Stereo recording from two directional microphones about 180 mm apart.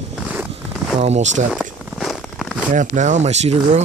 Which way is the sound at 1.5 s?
Centre (ahead or behind).